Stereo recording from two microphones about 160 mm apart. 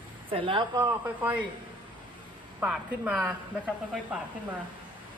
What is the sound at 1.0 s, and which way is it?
Speech, 10° right (ahead or behind).